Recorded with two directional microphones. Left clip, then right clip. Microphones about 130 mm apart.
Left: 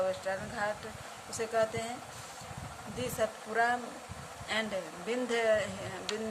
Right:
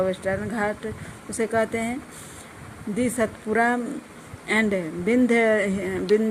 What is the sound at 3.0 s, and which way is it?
Speech, 70° right (ahead or behind).